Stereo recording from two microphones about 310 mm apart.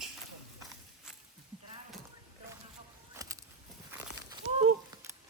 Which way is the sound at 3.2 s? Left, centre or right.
Centre.